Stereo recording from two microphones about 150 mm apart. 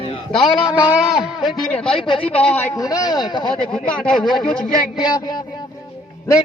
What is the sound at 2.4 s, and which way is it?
Speech, 15° left (ahead or behind).